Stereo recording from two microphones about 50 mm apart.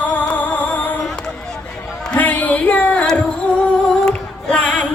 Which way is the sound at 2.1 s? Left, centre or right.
Left.